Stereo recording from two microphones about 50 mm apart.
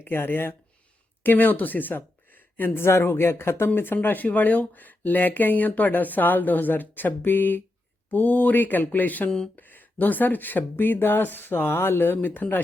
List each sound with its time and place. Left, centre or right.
0.0 s speech: left
4.0 s speech: left